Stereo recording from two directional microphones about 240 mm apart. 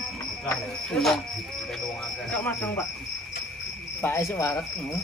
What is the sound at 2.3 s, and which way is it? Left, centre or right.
Cricket, centre.